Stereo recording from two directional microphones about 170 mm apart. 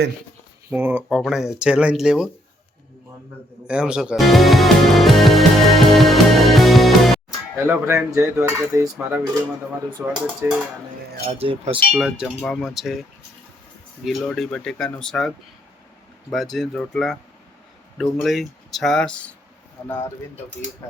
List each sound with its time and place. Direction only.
0.7 s cutlery: 10° right (ahead or behind)
1.2 s speech: centre (ahead or behind)
3.7 s speech: 5° right (ahead or behind)
7.5 s cutlery: 10° right (ahead or behind)
10.1 s speech: 5° right (ahead or behind)
11.3 s speech: 40° right (ahead or behind)
11.9 s speech: 5° right (ahead or behind)
16.3 s speech: centre (ahead or behind)